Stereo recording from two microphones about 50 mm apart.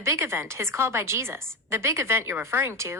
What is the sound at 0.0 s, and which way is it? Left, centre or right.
A woman's voice, right.